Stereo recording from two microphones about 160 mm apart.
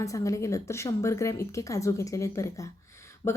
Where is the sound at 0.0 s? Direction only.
20° left (ahead or behind).